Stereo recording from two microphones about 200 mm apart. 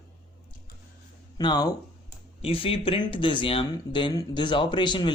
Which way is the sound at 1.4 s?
20° left (ahead or behind).